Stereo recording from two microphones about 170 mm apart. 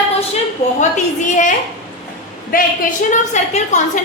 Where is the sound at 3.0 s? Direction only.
40° left (ahead or behind).